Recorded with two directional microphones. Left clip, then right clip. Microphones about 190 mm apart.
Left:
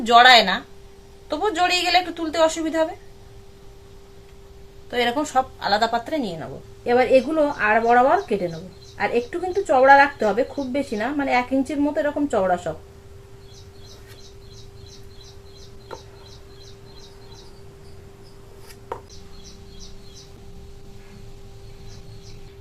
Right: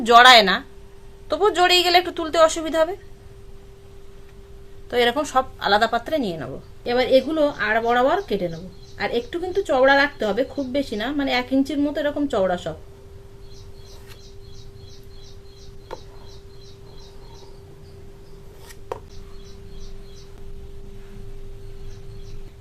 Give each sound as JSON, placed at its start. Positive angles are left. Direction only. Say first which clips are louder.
{"t": 0.0, "sound": "a woman's voice", "louder": "right 1 dB", "side_deg": -35}
{"t": 4.9, "sound": "a woman's voice", "louder": "right 2 dB", "side_deg": -35}
{"t": 6.8, "sound": "speech", "louder": "left 1 dB", "side_deg": -20}